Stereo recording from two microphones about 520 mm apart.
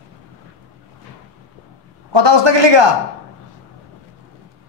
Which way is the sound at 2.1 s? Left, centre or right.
Right.